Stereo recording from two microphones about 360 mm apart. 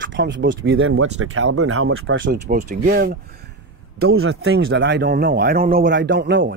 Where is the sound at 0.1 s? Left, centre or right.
Right.